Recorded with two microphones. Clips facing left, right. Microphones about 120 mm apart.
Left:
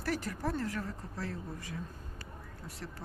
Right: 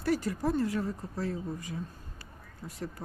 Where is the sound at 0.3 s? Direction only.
15° right (ahead or behind).